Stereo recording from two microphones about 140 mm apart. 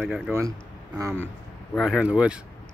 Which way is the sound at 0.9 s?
20° right (ahead or behind).